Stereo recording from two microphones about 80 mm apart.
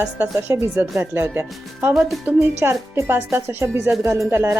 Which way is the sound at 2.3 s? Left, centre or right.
Centre.